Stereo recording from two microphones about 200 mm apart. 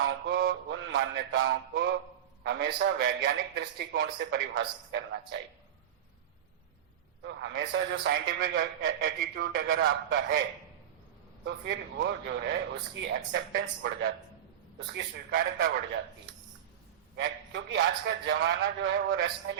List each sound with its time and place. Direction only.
0.3 s a man's voice: 55° right (ahead or behind); by 1.5 s 70° right (ahead or behind)
1.7 s a man's voice: 55° right (ahead or behind)
7.2 s a man's voice: 60° right (ahead or behind)
11.4 s a man's voice: 60° right (ahead or behind)
17.2 s a man's voice: 60° right (ahead or behind)